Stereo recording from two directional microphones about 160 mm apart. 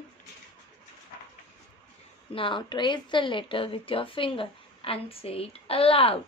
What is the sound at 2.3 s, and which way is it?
Speech, 30° left (ahead or behind).